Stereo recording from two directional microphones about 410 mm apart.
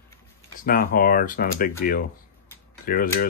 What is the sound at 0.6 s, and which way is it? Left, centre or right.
Speech, left.